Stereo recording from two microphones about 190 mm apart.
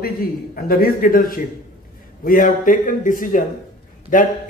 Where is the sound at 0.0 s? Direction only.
50° left (ahead or behind).